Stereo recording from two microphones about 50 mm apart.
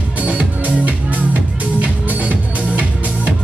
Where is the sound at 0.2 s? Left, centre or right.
Right.